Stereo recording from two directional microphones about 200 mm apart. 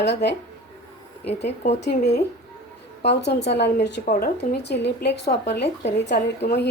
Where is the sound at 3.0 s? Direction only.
60° left (ahead or behind).